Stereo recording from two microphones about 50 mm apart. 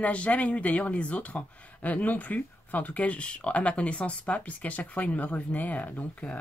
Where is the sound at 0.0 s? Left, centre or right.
Left.